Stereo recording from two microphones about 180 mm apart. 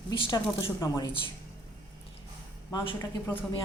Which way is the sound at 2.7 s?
20° left (ahead or behind).